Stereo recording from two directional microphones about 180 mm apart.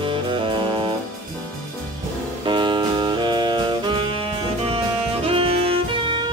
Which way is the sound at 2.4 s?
25° right (ahead or behind).